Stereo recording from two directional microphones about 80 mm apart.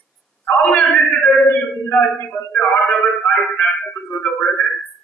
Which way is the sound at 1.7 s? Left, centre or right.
Left.